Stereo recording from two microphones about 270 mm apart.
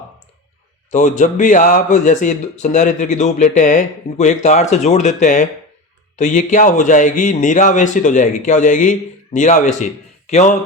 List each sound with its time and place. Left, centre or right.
0.9 s a man's voice: left